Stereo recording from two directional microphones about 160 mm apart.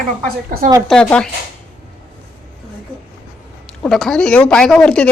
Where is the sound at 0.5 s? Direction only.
60° right (ahead or behind).